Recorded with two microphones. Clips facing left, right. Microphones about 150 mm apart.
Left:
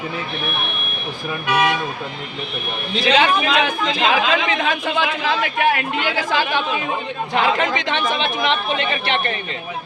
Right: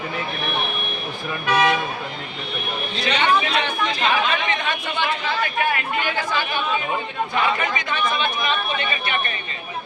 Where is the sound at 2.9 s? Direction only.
90° left.